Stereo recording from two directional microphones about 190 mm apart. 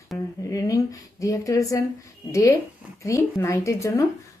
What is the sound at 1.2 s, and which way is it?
A woman's voice, 15° left (ahead or behind).